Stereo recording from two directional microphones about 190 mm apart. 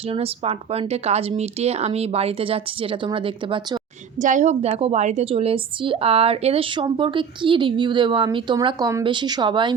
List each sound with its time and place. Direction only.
0.1 s speech: 30° right (ahead or behind)
4.2 s a woman's voice: 40° right (ahead or behind); by 9.7 s 25° right (ahead or behind)